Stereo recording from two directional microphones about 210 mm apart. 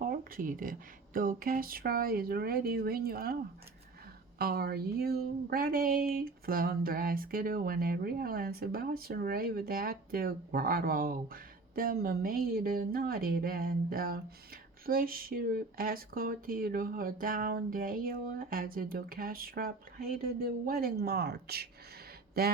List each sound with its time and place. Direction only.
0.0 s speech: 40° right (ahead or behind)
4.4 s speech: 45° right (ahead or behind)